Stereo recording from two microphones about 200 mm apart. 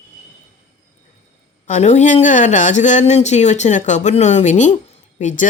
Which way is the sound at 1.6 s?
35° left (ahead or behind).